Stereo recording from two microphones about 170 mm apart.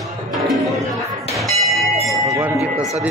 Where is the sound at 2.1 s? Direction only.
20° right (ahead or behind).